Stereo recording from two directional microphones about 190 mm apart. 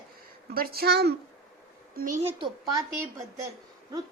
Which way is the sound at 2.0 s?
40° right (ahead or behind).